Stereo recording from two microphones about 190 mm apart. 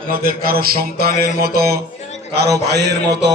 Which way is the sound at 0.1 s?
50° right (ahead or behind).